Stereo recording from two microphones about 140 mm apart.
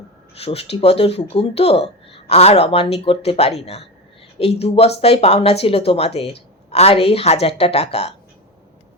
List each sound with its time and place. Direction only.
0.3 s speech: 45° left (ahead or behind)